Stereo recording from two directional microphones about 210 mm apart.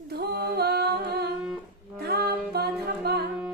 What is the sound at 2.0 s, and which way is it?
A capella, 50° right (ahead or behind).